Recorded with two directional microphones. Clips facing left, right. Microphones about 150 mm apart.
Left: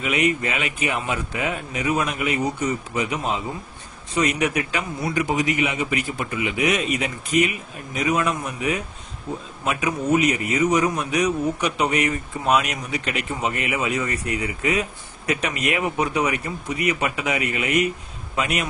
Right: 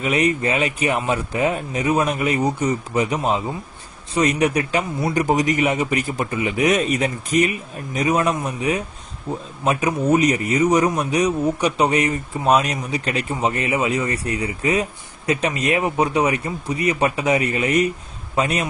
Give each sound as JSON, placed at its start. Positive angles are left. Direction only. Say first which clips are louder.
{"t": 0.0, "sound": "a man's voice", "louder": "right 3 dB", "side_deg": -35}